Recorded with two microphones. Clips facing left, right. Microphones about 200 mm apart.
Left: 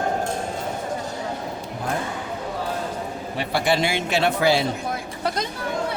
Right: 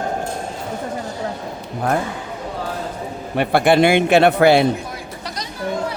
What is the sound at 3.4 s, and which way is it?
A man's voice, 55° right (ahead or behind).